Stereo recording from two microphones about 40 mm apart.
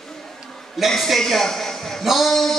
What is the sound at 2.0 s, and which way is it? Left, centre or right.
Speech, centre.